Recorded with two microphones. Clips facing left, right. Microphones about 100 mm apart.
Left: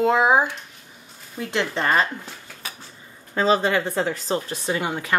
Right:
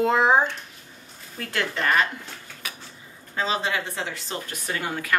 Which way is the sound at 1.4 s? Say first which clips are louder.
Left 3 dB; 20° left (ahead or behind).